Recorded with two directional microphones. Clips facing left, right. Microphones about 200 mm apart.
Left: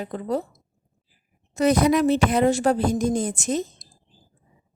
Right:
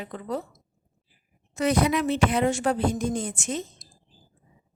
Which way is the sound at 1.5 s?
40° left (ahead or behind).